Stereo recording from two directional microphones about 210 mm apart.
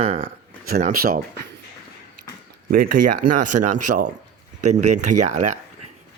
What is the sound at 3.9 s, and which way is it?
Speech, 45° right (ahead or behind).